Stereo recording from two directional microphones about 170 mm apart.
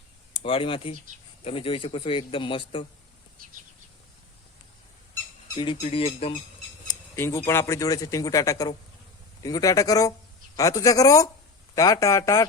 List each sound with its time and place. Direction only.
0.4 s a man's voice: 35° left (ahead or behind)
5.5 s a man's voice: 30° left (ahead or behind)
6.8 s speech: 15° left (ahead or behind)